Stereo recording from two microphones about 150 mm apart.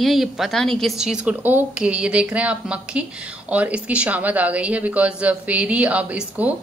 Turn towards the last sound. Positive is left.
turn(degrees=-10)  # may be behind; listen again after turning